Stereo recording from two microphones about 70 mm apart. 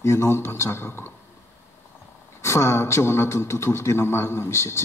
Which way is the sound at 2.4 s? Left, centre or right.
Left.